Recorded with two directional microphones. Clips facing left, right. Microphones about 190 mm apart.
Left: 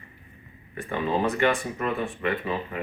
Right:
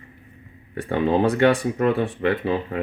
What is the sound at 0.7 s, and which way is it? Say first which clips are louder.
Speech: right 6 dB; 75° right (ahead or behind).